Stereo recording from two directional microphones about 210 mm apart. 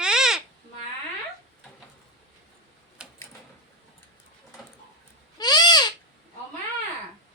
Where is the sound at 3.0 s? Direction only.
5° right (ahead or behind).